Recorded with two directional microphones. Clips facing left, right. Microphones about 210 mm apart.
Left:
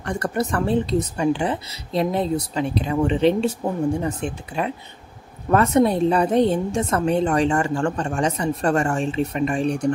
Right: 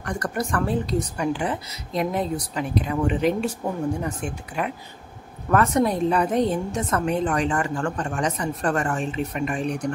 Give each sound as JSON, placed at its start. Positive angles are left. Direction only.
{"t": 0.0, "sound": "a woman's voice", "side_deg": 25}